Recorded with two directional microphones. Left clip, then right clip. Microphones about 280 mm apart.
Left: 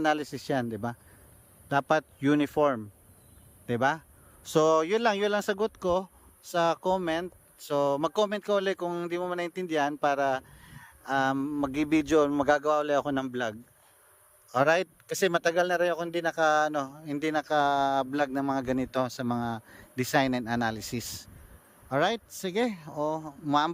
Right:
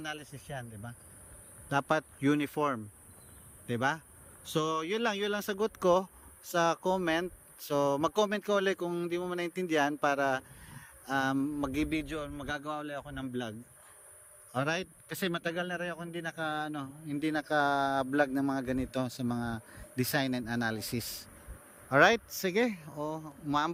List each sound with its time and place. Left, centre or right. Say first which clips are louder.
0.0 s speech: left 14 dB; centre
1.7 s speech: left 4 dB; centre